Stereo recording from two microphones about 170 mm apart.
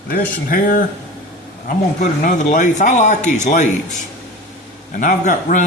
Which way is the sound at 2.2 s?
50° left (ahead or behind).